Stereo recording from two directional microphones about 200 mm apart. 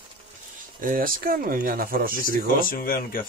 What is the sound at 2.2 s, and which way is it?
Speech, 45° left (ahead or behind).